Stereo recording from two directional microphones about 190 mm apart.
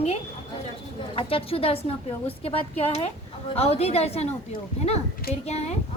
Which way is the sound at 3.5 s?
30° left (ahead or behind).